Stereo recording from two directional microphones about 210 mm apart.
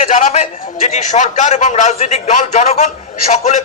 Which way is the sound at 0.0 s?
35° left (ahead or behind).